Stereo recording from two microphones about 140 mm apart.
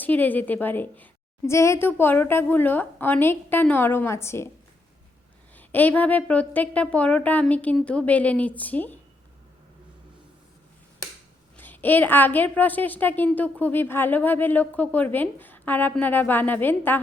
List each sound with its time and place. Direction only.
0.0 s a woman's voice: 10° left (ahead or behind)
5.5 s a woman's voice: 10° left (ahead or behind)
11.5 s a woman's voice: 15° left (ahead or behind)